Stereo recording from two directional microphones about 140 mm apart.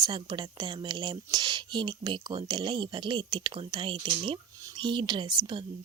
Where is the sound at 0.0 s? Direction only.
30° right (ahead or behind).